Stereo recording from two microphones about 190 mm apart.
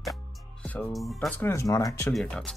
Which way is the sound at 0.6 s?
5° left (ahead or behind).